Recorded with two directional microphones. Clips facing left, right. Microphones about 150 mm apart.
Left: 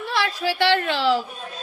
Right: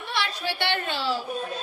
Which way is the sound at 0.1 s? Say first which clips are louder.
Left 5 dB; 90° left.